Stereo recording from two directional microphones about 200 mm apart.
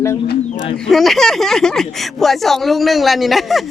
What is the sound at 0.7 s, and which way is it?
Speech, centre (ahead or behind).